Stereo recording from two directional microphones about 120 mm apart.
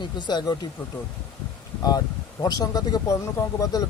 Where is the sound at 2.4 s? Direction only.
30° left (ahead or behind).